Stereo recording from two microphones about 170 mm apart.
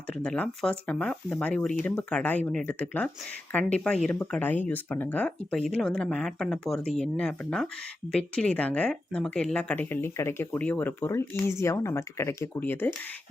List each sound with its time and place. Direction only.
0.1 s speech: 5° left (ahead or behind)